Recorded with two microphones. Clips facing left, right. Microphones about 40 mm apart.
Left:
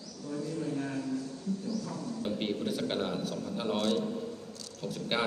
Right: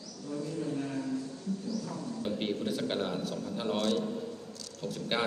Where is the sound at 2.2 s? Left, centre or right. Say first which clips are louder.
Even; centre.